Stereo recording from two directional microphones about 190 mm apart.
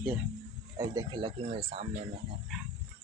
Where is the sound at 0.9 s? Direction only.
20° right (ahead or behind).